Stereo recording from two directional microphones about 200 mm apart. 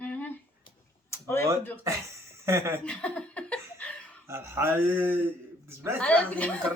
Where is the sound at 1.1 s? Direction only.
15° left (ahead or behind).